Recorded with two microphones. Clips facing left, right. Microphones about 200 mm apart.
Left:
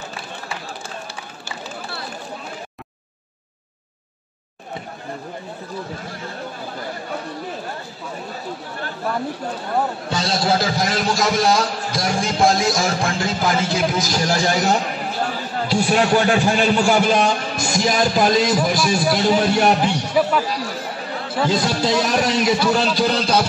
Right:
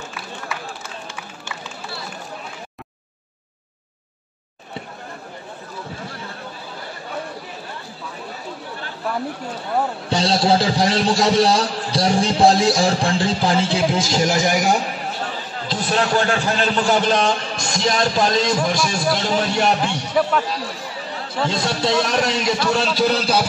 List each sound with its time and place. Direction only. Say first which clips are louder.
10.1 s a man's voice: right 3 dB; 30° right (ahead or behind); by 14.8 s 15° right (ahead or behind)
15.7 s a man's voice: left 3 dB; 10° left (ahead or behind); by 23.4 s 5° right (ahead or behind)